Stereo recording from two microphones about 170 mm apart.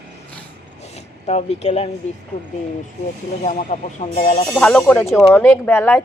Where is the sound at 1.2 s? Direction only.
40° left (ahead or behind).